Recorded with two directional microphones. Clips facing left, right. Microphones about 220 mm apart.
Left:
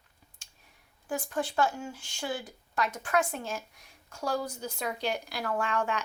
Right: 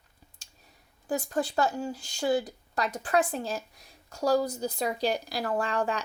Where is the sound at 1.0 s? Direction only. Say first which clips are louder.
Right 3 dB; 40° right (ahead or behind).